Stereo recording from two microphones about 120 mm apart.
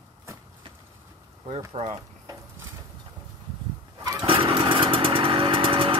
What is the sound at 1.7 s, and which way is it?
Speech, 60° right (ahead or behind).